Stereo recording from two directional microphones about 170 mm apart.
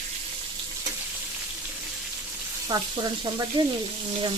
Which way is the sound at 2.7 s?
25° right (ahead or behind).